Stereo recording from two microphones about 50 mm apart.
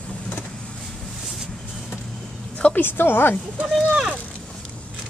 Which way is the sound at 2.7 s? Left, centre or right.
Left.